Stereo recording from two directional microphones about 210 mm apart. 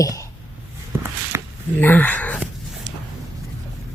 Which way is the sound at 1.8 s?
10° left (ahead or behind).